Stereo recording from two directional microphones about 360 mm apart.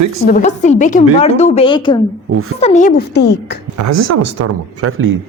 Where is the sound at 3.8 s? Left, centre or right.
Right.